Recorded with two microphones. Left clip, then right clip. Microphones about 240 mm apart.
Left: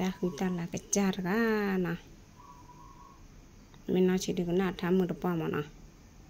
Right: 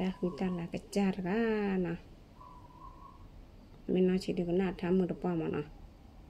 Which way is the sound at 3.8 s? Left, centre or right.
Centre.